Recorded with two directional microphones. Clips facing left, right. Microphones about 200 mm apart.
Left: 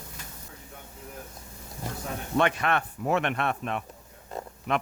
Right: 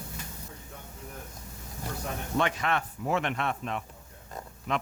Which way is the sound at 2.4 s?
60° left (ahead or behind).